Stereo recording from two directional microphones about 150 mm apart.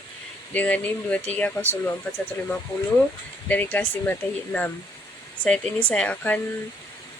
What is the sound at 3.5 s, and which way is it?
Speech, 10° left (ahead or behind).